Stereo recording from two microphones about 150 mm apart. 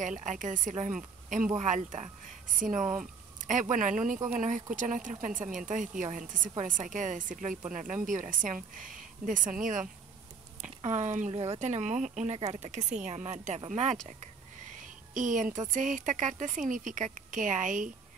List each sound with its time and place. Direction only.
0.0 s a woman's voice: 55° right (ahead or behind)
3.3 s a sound: 55° right (ahead or behind)
3.7 s a woman's voice: 60° right (ahead or behind)
10.6 s speech: 50° right (ahead or behind)
15.1 s a woman's voice: 60° right (ahead or behind)